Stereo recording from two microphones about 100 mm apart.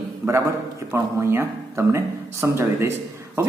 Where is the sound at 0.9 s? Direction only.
25° right (ahead or behind).